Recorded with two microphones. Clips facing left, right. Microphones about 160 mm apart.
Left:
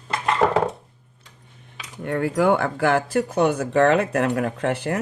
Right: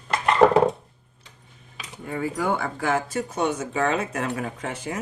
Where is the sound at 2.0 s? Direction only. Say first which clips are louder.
Left 6 dB; 70° left (ahead or behind).